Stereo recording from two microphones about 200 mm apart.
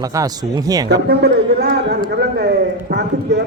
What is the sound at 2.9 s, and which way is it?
Clip-clop, 55° right (ahead or behind).